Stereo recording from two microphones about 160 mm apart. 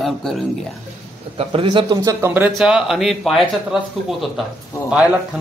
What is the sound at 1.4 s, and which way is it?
Speech, 35° right (ahead or behind).